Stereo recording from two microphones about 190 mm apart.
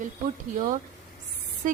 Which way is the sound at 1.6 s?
45° right (ahead or behind).